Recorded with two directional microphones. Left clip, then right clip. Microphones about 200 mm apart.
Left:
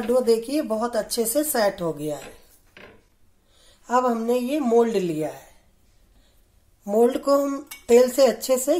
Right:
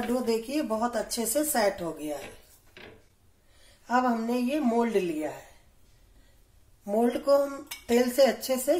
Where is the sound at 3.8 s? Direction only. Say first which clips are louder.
Left 5 dB; 35° left (ahead or behind).